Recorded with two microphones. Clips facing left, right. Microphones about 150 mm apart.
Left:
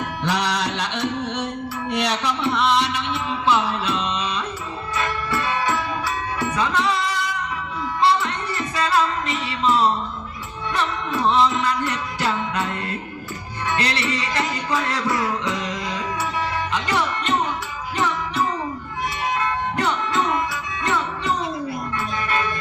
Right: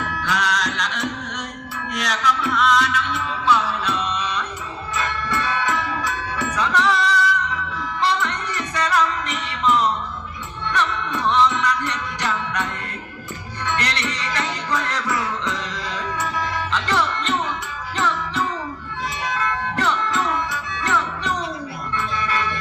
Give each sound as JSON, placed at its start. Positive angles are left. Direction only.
{"t": 0.2, "sound": "music", "side_deg": 30}
{"t": 8.2, "sound": "music", "side_deg": 25}
{"t": 13.7, "sound": "music", "side_deg": 20}